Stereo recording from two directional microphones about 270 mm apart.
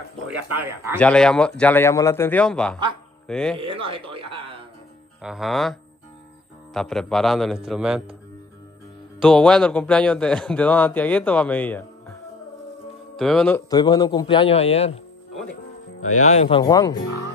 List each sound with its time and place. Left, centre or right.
0.9 s a man's voice: centre
3.8 s speech: centre
5.2 s a man's voice: centre
9.2 s a man's voice: centre
13.7 s a man's voice: centre
16.0 s speech: left
16.3 s a man's voice: centre